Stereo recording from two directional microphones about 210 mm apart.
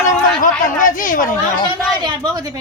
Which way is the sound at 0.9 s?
40° left (ahead or behind).